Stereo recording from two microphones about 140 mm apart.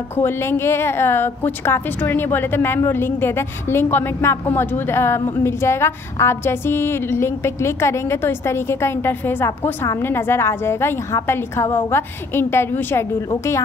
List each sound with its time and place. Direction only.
0.1 s a woman's voice: 15° left (ahead or behind)